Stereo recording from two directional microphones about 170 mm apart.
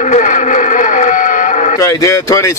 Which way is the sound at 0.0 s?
45° left (ahead or behind).